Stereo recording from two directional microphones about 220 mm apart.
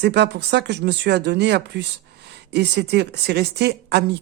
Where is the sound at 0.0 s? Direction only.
50° right (ahead or behind).